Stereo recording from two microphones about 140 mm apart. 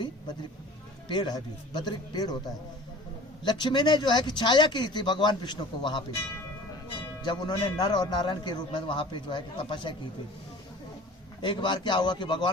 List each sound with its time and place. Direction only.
1.0 s a man's voice: 35° left (ahead or behind)
3.4 s a man's voice: 30° left (ahead or behind)
7.3 s a man's voice: 30° left (ahead or behind)
11.4 s a man's voice: 35° left (ahead or behind)